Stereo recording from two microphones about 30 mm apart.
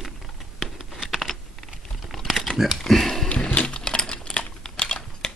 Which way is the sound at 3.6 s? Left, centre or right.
Left.